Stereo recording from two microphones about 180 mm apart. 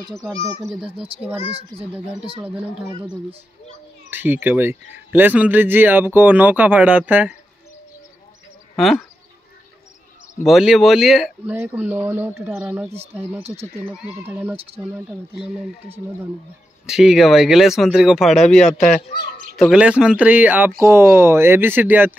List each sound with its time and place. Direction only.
0.6 s speech: centre (ahead or behind)
1.5 s a child's voice: 30° right (ahead or behind)
4.1 s a man's voice: 10° right (ahead or behind)
8.7 s speech: centre (ahead or behind)
10.4 s a man's voice: centre (ahead or behind)